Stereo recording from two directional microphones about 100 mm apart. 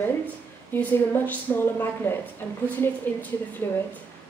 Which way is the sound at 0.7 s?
20° left (ahead or behind).